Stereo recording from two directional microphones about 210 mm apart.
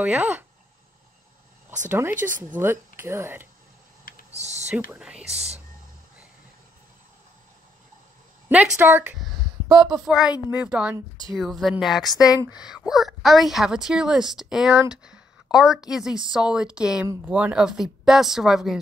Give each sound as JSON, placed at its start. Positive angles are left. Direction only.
{"t": 0.0, "sound": "speech", "side_deg": -5}
{"t": 1.9, "sound": "speech", "side_deg": -10}
{"t": 4.4, "sound": "speech", "side_deg": -30}
{"t": 4.9, "sound": "speech", "side_deg": -5}
{"t": 8.5, "sound": "speech", "side_deg": -5}
{"t": 9.9, "sound": "speech", "side_deg": 0}
{"t": 12.0, "sound": "speech", "side_deg": 20}
{"t": 12.4, "sound": "speech", "side_deg": -5}